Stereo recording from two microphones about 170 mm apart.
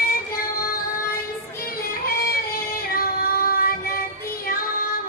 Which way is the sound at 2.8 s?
60° left (ahead or behind).